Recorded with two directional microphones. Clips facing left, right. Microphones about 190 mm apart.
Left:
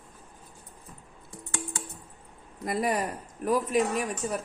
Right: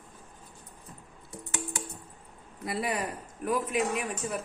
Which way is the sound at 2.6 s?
45° left (ahead or behind).